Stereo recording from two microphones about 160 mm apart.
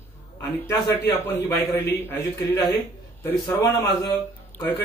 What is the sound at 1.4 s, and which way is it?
Speech, 15° left (ahead or behind).